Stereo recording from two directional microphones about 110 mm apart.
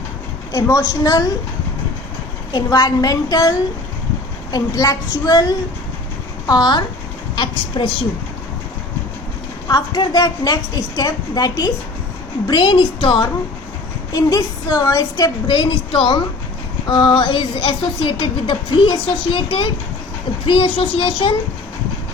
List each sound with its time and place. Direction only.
0.5 s a woman's voice: 30° left (ahead or behind)
2.5 s a woman's voice: 35° left (ahead or behind)
4.5 s a woman's voice: 35° left (ahead or behind); by 7.9 s 50° left (ahead or behind)
9.6 s a woman's voice: 35° left (ahead or behind)